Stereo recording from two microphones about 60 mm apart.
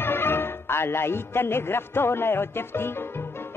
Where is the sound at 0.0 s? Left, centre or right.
Left.